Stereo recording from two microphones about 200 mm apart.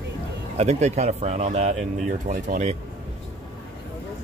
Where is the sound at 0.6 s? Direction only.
35° right (ahead or behind).